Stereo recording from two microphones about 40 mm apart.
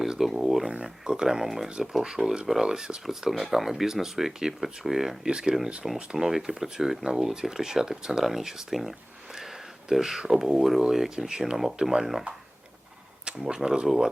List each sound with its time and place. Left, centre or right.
0.0 s a sound: centre
1.0 s speech: centre
2.1 s speech: right
6.1 s speech: centre
13.2 s speech: right